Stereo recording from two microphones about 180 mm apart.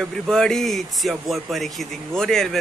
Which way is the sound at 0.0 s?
Centre (ahead or behind).